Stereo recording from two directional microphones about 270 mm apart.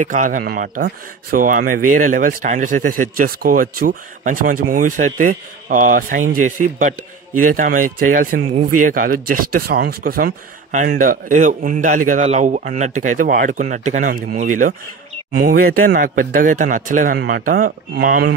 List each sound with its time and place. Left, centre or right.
0.0 s a man's voice: right